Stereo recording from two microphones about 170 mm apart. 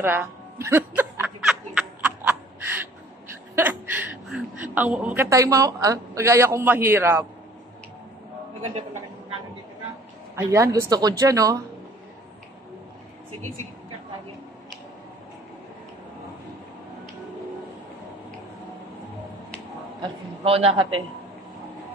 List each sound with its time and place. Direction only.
0.0 s music: 15° right (ahead or behind)
3.5 s a woman's voice: 10° right (ahead or behind)
10.3 s speech: 15° right (ahead or behind)
20.0 s a woman's voice: 35° right (ahead or behind)